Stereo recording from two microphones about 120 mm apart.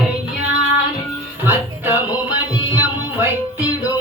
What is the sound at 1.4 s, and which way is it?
Music, 15° right (ahead or behind).